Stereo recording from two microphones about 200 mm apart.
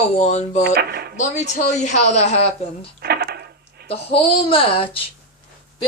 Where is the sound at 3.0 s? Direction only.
50° right (ahead or behind).